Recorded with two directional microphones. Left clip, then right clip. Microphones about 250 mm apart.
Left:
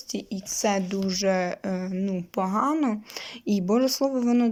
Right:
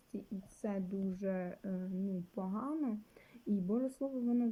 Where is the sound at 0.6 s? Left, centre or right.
Centre.